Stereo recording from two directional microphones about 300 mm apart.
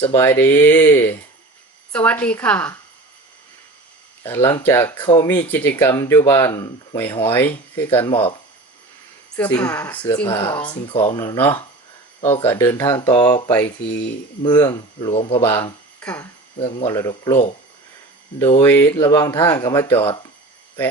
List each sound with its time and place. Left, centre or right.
0.0 s a woman's voice: centre
4.2 s speech: centre
8.1 s speech: centre
9.3 s a woman's voice: centre
10.2 s speech: centre
15.4 s speech: centre
18.6 s speech: centre